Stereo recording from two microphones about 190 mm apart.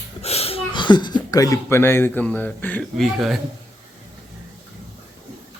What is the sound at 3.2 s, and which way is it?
Speech, centre (ahead or behind).